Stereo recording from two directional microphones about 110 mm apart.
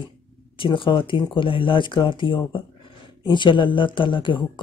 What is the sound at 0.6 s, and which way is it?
Speech, 50° left (ahead or behind).